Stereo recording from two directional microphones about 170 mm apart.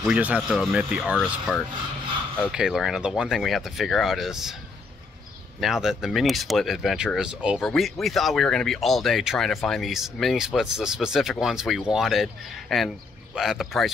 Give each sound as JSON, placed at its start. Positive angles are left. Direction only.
{"t": 0.0, "sound": "speech", "side_deg": -5}
{"t": 5.6, "sound": "speech", "side_deg": -5}